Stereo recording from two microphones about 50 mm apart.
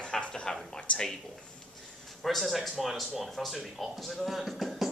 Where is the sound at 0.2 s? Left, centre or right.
Centre.